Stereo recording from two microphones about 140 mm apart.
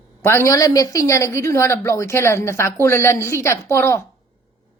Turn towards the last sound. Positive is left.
turn(degrees=20)  # may be behind; listen again after turning